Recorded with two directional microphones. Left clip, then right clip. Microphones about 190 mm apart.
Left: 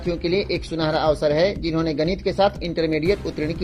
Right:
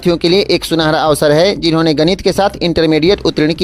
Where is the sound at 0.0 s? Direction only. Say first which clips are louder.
Right 11 dB; 45° right (ahead or behind).